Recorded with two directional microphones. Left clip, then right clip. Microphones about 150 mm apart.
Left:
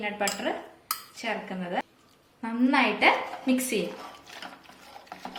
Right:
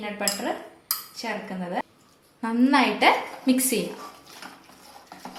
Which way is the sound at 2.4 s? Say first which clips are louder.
Right 3 dB; 50° right (ahead or behind).